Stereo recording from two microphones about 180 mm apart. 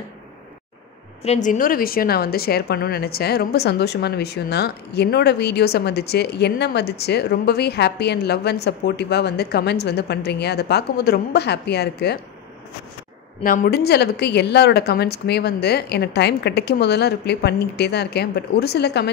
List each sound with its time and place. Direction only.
1.2 s a woman's voice: 40° left (ahead or behind); by 12.2 s 65° left (ahead or behind)
13.4 s a woman's voice: 50° left (ahead or behind); by 19.0 s 65° left (ahead or behind)